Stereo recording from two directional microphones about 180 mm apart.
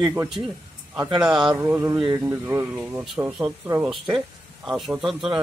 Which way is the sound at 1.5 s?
10° right (ahead or behind).